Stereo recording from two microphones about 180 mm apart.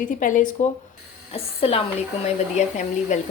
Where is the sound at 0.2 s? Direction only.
45° left (ahead or behind).